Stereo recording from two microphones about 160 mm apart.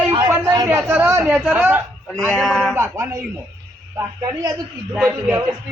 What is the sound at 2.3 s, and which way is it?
Speech, centre (ahead or behind).